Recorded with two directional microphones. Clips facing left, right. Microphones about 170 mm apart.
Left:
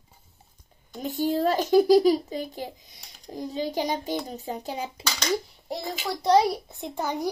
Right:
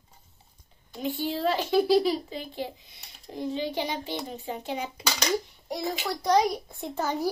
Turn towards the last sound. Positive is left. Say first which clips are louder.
# even
turn(degrees=15)  # may be behind; listen again after turning